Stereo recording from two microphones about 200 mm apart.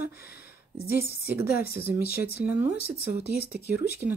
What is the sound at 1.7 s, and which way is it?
Speech, 10° right (ahead or behind).